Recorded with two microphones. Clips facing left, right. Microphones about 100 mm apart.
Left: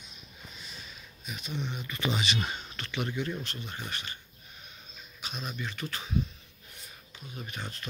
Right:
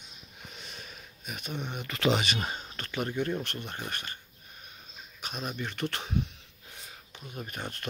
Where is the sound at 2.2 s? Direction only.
45° right (ahead or behind).